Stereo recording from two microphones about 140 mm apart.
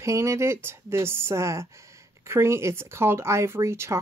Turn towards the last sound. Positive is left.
turn(degrees=-20)  # may be behind; listen again after turning